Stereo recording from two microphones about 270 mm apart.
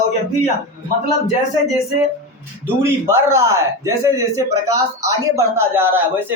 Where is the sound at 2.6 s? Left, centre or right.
Centre.